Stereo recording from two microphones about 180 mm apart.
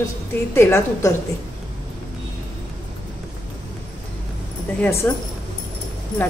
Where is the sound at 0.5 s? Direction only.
15° left (ahead or behind).